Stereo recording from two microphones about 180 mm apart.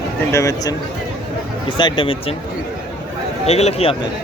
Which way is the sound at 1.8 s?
25° left (ahead or behind).